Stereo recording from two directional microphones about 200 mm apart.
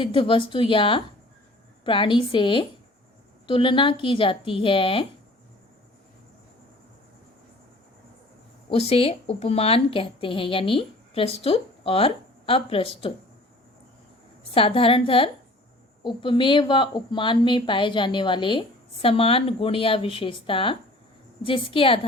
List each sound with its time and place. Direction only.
0.0 s a woman's voice: 25° left (ahead or behind)
8.7 s a woman's voice: 30° left (ahead or behind)
14.5 s a woman's voice: 25° left (ahead or behind)